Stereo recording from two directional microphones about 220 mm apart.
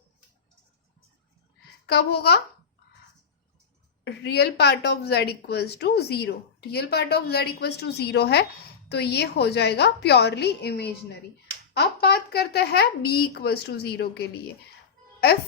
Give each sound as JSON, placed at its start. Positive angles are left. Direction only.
{"t": 1.9, "sound": "a woman's voice", "side_deg": 45}
{"t": 4.0, "sound": "a woman's voice", "side_deg": 50}